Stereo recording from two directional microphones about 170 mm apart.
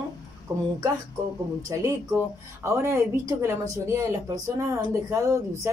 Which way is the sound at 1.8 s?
15° right (ahead or behind).